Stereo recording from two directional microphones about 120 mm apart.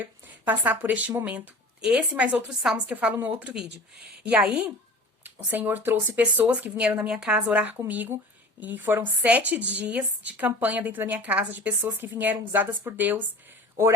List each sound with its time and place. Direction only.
0.0 s a woman's voice: 15° right (ahead or behind)